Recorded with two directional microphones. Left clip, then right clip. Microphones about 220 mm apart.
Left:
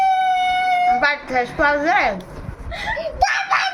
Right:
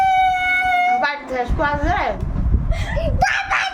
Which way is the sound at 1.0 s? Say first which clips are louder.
Left 2 dB; centre (ahead or behind).